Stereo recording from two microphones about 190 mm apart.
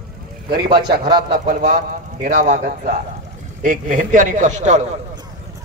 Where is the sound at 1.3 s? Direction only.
45° right (ahead or behind).